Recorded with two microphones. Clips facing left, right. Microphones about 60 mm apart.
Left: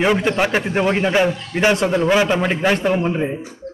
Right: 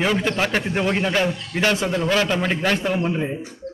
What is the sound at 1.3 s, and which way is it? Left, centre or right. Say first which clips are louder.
Speech: left 3 dB; centre.